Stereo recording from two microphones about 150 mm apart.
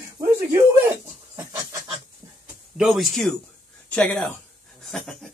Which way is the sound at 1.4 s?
20° right (ahead or behind).